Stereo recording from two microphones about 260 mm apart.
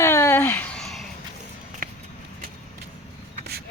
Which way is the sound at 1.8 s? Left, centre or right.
Right.